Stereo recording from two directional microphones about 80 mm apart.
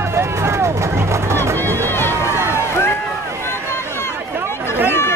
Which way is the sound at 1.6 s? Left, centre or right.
Left.